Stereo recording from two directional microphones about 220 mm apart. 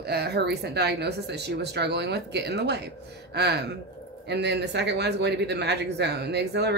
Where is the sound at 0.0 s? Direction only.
45° right (ahead or behind).